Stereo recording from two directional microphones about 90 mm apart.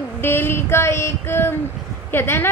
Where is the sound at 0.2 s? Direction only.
25° left (ahead or behind).